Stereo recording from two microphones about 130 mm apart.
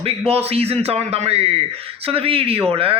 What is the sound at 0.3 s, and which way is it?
Speech, 50° right (ahead or behind).